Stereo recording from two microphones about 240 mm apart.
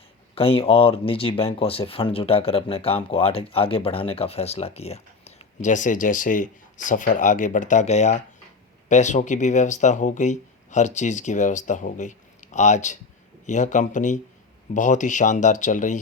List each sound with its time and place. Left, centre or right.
0.3 s speech: left